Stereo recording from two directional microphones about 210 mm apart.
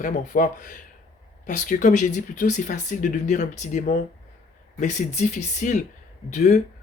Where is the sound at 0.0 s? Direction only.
40° left (ahead or behind).